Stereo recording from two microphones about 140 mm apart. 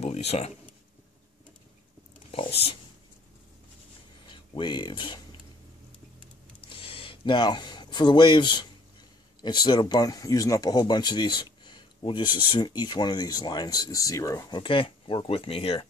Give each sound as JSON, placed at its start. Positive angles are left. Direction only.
{"t": 0.0, "sound": "speech", "side_deg": 50}
{"t": 2.3, "sound": "speech", "side_deg": 40}
{"t": 4.3, "sound": "speech", "side_deg": 35}
{"t": 6.6, "sound": "a sound", "side_deg": 40}
{"t": 9.4, "sound": "speech", "side_deg": 30}